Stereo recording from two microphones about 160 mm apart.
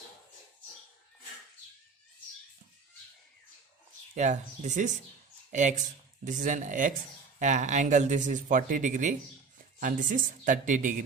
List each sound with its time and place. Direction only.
4.1 s speech: 50° right (ahead or behind)